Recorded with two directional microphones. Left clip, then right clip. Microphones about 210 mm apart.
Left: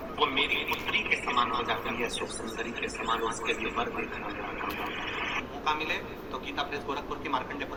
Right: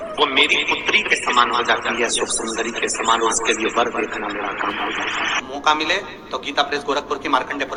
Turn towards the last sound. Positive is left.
turn(degrees=-50)  # may be behind; listen again after turning